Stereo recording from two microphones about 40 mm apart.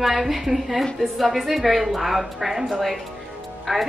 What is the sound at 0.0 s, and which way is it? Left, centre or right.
A woman's voice, centre.